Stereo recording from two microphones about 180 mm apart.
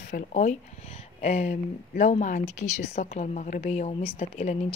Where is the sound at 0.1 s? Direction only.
45° left (ahead or behind).